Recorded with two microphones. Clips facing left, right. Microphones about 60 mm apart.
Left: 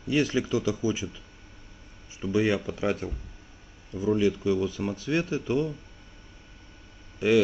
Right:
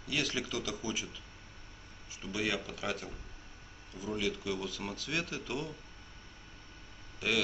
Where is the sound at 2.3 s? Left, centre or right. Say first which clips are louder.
Left 10 dB; left.